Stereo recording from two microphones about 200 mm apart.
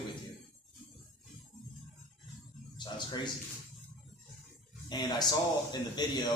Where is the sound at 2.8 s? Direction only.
20° left (ahead or behind).